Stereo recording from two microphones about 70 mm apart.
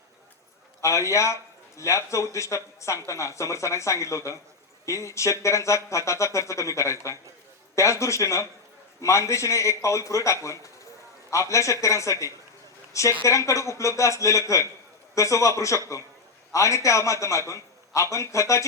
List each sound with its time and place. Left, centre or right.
0.8 s speech: left